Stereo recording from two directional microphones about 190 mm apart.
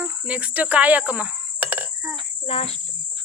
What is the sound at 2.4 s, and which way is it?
Cricket, 30° left (ahead or behind).